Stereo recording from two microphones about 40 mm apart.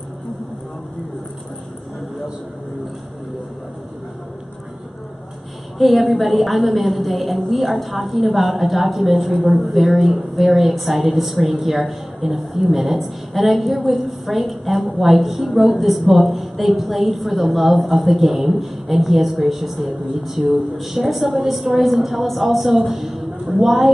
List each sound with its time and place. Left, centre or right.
5.8 s a woman's voice: centre